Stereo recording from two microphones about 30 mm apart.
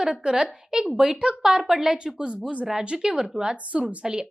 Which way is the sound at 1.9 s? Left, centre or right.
Right.